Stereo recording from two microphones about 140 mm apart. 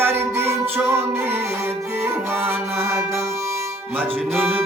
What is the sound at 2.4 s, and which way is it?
Music, 20° right (ahead or behind).